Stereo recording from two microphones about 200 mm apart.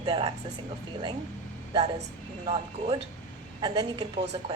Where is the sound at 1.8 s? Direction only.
35° right (ahead or behind).